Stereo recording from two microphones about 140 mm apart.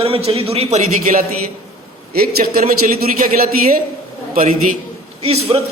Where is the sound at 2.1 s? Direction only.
90° right.